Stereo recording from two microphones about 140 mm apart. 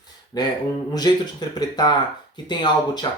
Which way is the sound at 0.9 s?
30° left (ahead or behind).